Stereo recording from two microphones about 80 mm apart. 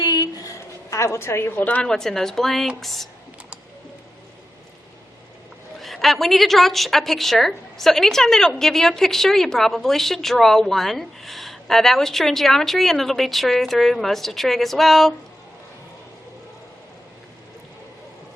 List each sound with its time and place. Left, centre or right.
0.0 s a woman's voice: left; by 3.1 s centre
5.8 s a woman's voice: centre